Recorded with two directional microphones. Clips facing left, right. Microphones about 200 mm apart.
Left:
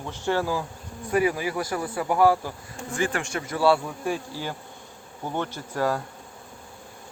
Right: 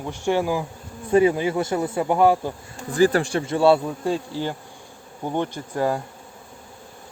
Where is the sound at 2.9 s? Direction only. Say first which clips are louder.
Right 9 dB; 35° right (ahead or behind); by 6.0 s 15° right (ahead or behind).